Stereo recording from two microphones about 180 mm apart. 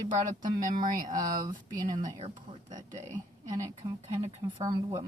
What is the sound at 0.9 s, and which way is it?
A woman's voice, 20° right (ahead or behind).